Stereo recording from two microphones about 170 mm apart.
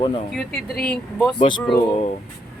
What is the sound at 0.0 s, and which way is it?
Speech, 30° left (ahead or behind).